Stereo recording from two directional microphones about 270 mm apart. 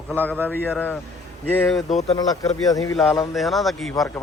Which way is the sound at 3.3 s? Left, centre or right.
Centre.